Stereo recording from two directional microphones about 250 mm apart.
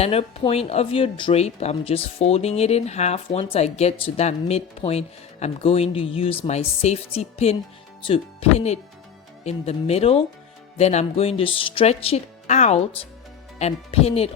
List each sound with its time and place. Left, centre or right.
0.0 s speech: left